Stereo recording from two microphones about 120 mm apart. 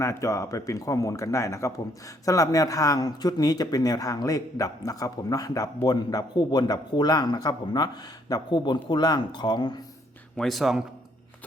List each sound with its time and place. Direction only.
0.0 s a man's voice: 25° left (ahead or behind)
10.3 s speech: centre (ahead or behind)